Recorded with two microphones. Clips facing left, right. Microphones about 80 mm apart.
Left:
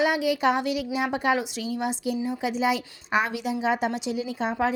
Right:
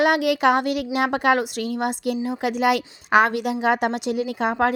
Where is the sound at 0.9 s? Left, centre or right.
Right.